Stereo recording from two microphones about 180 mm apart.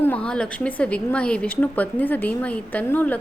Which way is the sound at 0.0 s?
5° left (ahead or behind).